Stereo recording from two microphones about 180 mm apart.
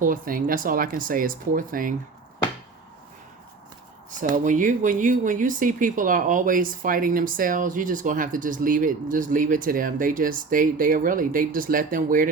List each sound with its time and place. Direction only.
0.0 s speech: 50° right (ahead or behind)
4.2 s speech: 45° right (ahead or behind)